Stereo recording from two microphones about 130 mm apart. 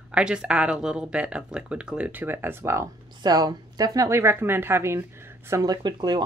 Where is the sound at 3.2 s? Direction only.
30° right (ahead or behind).